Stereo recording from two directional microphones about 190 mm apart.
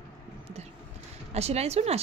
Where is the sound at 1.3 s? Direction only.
35° right (ahead or behind).